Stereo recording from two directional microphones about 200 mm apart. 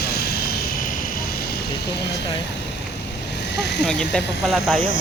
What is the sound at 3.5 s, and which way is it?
Speech, 55° left (ahead or behind).